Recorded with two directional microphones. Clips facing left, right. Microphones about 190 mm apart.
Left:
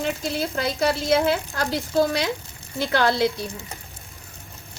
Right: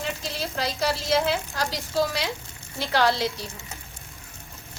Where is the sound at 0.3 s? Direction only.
55° left (ahead or behind).